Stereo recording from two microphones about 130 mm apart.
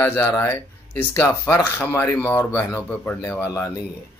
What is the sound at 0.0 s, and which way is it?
Speech, 20° left (ahead or behind).